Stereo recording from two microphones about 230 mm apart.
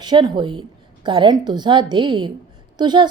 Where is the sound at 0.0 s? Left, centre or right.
Centre.